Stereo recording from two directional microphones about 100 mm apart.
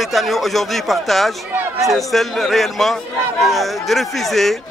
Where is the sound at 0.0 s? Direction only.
Centre (ahead or behind).